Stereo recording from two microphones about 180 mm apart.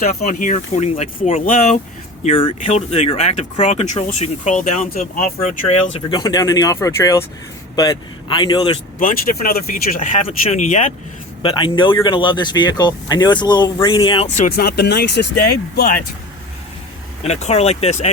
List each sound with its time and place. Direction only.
0.0 s speech: 40° left (ahead or behind)
2.2 s speech: 30° left (ahead or behind)
6.1 s speech: 25° left (ahead or behind)
9.0 s speech: 50° left (ahead or behind)
11.4 s speech: 25° left (ahead or behind)
14.3 s speech: 45° left (ahead or behind)
17.2 s speech: 40° left (ahead or behind)